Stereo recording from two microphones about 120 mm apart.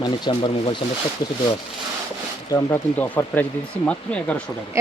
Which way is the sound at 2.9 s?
15° left (ahead or behind).